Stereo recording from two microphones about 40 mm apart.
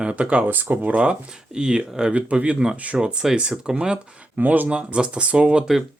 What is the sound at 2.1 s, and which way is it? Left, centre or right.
Speech, right.